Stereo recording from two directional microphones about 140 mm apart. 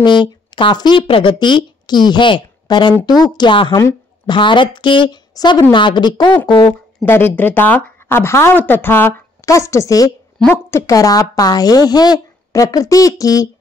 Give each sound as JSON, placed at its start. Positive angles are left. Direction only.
{"t": 0.0, "sound": "a woman's voice", "side_deg": 35}
{"t": 7.1, "sound": "a woman's voice", "side_deg": 15}